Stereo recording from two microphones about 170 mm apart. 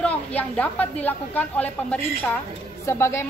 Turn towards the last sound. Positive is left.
turn(degrees=15)  # may be behind; listen again after turning